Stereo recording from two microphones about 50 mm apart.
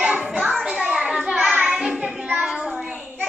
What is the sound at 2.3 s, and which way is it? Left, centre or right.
Child singing, right.